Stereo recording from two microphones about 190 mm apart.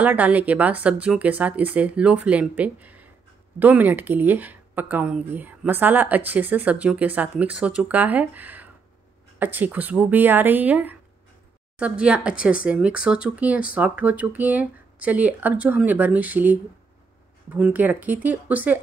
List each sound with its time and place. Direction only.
0.0 s a woman's voice: 10° right (ahead or behind)
17.6 s a woman's voice: 5° right (ahead or behind)